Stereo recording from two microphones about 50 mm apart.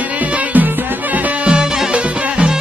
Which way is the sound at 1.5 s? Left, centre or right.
Centre.